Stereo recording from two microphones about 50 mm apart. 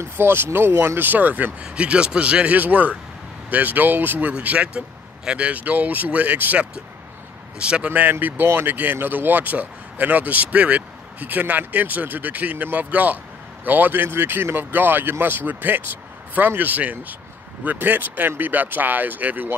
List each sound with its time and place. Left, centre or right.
0.0 s speech: right
1.6 s speech: right
4.3 s speech: right
7.5 s speech: right
7.9 s speech: right